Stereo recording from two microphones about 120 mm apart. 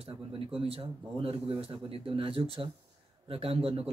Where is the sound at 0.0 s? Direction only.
50° right (ahead or behind).